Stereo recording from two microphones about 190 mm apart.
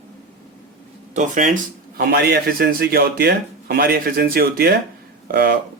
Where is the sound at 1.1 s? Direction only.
40° right (ahead or behind).